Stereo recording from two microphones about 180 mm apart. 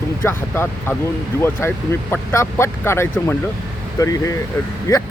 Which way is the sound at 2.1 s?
10° left (ahead or behind).